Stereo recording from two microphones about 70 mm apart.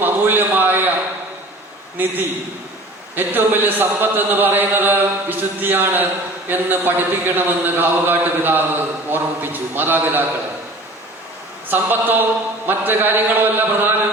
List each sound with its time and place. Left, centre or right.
0.0 s a sound: right
2.0 s a man's voice: right
3.2 s a man's voice: right
11.7 s a man's voice: right